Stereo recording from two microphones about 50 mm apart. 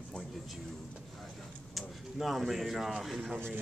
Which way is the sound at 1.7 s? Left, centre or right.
Centre.